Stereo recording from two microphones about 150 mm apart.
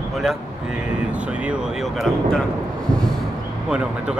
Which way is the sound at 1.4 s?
Centre (ahead or behind).